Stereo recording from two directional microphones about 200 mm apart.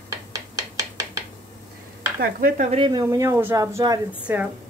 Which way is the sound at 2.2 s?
45° right (ahead or behind).